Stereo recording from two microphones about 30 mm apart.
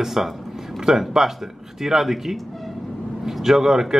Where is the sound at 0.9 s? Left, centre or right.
Right.